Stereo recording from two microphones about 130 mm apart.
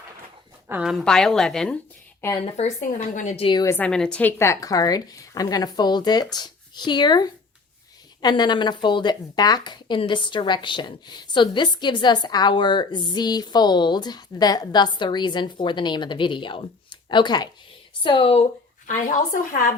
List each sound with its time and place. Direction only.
0.7 s a woman's voice: 5° right (ahead or behind)
2.4 s a woman's voice: 60° left (ahead or behind)
3.8 s a woman's voice: 5° left (ahead or behind); by 18.4 s 45° left (ahead or behind)
18.9 s a woman's voice: 80° left